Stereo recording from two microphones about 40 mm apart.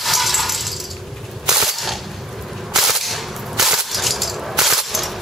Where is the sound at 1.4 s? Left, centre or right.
Centre.